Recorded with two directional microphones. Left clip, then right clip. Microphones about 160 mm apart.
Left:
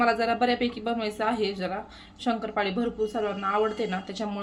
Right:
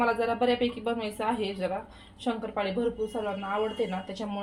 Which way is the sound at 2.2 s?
40° left (ahead or behind).